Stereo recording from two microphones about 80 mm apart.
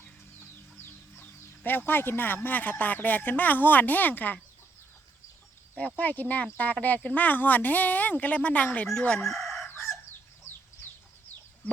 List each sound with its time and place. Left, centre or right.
1.1 s bird: left
1.9 s speech: left
5.7 s speech: centre
8.9 s crowing: centre
9.3 s chicken: centre
9.6 s chicken: left